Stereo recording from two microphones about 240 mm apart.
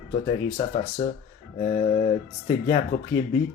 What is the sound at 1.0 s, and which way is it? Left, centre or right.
Speech, left.